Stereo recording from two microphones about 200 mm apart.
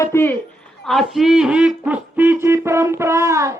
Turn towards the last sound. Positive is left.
turn(degrees=-15)  # may be behind; listen again after turning